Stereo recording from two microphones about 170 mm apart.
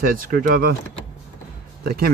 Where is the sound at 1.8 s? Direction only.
65° right (ahead or behind).